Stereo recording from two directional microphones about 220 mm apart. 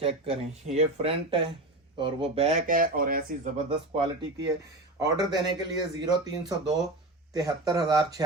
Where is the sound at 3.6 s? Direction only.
25° right (ahead or behind).